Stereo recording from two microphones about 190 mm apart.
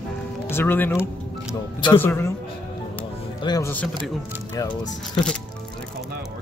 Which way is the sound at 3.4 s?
20° left (ahead or behind).